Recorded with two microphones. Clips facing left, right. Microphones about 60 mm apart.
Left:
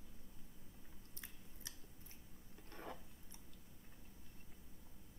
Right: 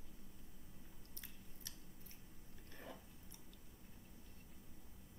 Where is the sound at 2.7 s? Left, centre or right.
Left.